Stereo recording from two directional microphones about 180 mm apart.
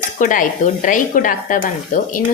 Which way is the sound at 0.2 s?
45° left (ahead or behind).